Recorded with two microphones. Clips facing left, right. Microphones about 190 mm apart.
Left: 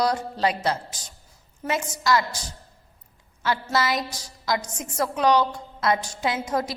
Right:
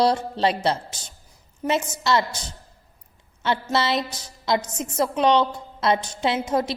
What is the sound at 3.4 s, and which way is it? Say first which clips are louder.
A woman's voice: right 2 dB; 25° right (ahead or behind).